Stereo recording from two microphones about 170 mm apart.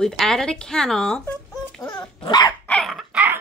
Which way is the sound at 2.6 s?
5° left (ahead or behind).